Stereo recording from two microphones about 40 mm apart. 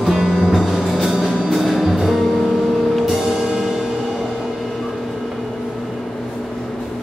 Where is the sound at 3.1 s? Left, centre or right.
Centre.